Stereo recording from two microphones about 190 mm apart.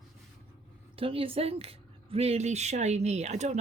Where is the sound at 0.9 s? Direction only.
30° right (ahead or behind).